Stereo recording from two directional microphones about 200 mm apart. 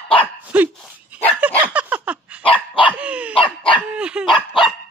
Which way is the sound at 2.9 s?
5° right (ahead or behind).